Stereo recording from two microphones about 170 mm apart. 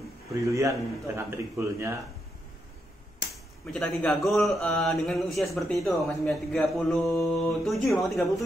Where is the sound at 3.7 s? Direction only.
5° left (ahead or behind).